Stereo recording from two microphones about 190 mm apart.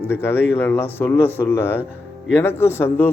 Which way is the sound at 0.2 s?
10° left (ahead or behind).